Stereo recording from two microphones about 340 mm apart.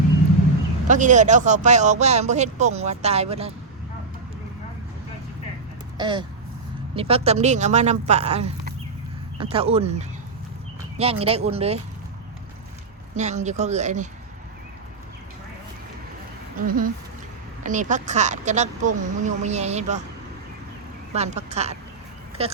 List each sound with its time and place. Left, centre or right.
0.9 s speech: right
6.0 s speech: centre
13.1 s speech: right
16.6 s speech: right
21.1 s speech: centre